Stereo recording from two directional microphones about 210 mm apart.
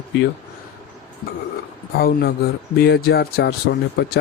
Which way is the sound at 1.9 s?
50° left (ahead or behind).